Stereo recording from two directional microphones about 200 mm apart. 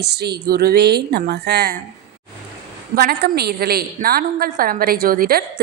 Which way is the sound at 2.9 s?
50° right (ahead or behind).